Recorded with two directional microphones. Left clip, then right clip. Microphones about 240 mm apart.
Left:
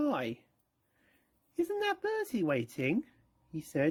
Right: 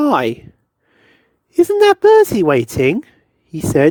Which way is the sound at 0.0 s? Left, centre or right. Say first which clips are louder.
Right 18 dB; right.